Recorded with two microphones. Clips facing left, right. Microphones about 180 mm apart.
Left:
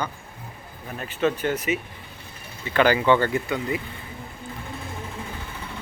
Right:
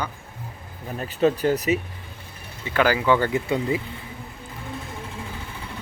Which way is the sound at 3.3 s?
30° right (ahead or behind).